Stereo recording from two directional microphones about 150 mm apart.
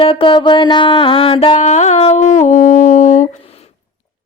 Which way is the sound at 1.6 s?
50° left (ahead or behind).